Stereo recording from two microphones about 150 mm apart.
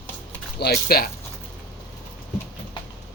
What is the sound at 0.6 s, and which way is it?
Speech, 90° left.